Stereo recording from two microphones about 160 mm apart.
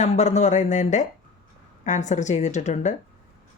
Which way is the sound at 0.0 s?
45° left (ahead or behind).